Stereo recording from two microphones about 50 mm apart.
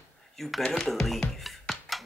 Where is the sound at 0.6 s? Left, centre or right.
Centre.